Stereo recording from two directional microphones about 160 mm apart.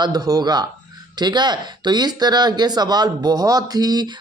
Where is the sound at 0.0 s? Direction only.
25° right (ahead or behind).